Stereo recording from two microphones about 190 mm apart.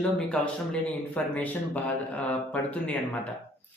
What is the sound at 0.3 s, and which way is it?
Speech, 5° left (ahead or behind).